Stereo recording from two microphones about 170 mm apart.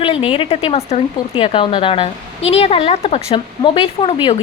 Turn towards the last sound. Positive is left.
turn(degrees=30)  # may be behind; listen again after turning